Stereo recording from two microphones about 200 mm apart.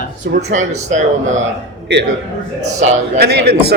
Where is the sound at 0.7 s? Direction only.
35° right (ahead or behind).